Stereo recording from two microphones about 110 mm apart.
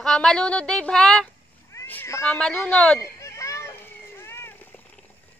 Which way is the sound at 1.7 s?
25° left (ahead or behind).